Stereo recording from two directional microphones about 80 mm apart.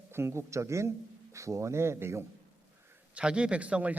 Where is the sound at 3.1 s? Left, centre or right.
Centre.